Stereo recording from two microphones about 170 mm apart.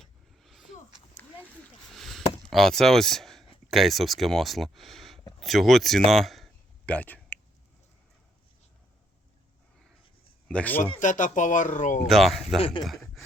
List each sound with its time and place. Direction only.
0.0 s vehicle: centre (ahead or behind)
1.9 s rowboat: centre (ahead or behind)
2.4 s speech: centre (ahead or behind)
10.5 s speech: 10° left (ahead or behind)
11.0 s speech: 45° left (ahead or behind)
12.0 s speech: centre (ahead or behind)